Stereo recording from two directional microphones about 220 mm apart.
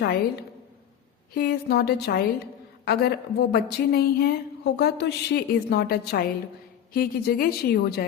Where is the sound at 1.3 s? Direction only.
45° left (ahead or behind).